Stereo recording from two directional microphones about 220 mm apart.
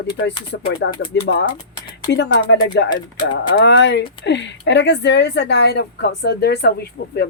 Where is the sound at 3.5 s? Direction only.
45° left (ahead or behind).